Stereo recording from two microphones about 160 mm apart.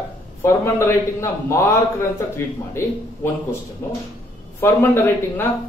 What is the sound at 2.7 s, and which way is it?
A man's voice, 15° left (ahead or behind).